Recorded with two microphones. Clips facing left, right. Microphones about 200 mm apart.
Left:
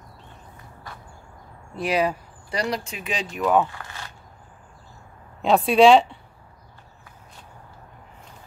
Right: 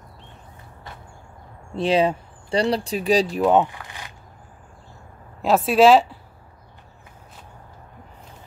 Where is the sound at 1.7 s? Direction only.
25° right (ahead or behind).